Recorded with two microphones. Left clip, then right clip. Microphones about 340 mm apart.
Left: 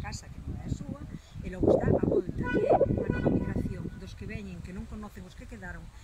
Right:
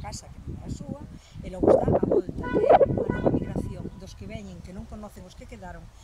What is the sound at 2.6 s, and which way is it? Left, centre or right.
Speech, right.